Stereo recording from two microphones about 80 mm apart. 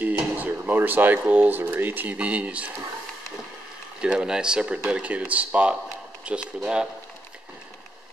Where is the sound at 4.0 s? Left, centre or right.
Centre.